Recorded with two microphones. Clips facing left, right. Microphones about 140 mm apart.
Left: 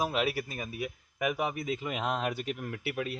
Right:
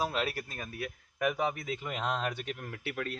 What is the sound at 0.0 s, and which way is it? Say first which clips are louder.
Speech: left 3 dB; 10° left (ahead or behind).